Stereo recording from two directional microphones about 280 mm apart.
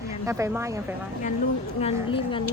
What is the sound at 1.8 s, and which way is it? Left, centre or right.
Speech, centre.